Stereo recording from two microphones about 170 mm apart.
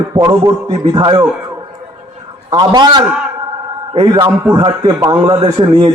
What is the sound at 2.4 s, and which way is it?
A man's voice, 25° right (ahead or behind).